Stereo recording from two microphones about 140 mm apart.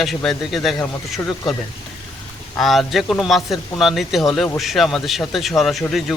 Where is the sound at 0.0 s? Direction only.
Centre (ahead or behind).